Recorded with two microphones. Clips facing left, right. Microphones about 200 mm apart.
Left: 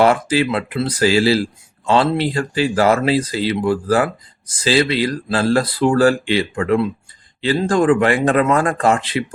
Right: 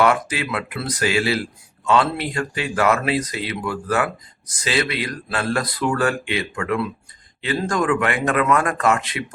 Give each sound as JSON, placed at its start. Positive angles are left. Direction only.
{"t": 0.0, "sound": "speech", "side_deg": 30}